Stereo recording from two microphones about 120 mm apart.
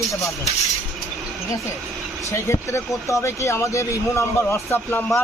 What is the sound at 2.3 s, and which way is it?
Speech, 25° left (ahead or behind).